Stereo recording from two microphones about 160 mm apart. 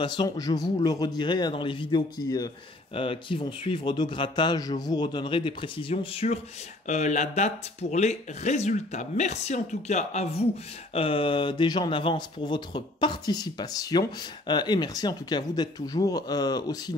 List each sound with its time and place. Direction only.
0.0 s speech: 30° left (ahead or behind)
2.9 s speech: 35° left (ahead or behind)